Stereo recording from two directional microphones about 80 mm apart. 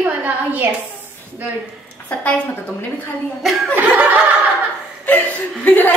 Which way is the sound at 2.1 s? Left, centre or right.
Centre.